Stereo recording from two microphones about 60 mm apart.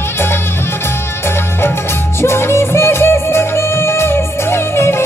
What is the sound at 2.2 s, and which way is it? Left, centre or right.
Music, left.